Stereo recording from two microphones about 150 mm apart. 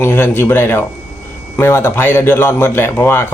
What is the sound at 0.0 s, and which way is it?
A man's voice, 15° left (ahead or behind).